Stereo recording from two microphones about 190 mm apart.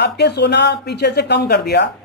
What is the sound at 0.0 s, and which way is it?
A woman's voice, 60° left (ahead or behind).